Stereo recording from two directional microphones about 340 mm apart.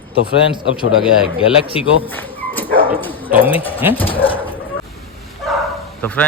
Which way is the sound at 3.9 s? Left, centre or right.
Centre.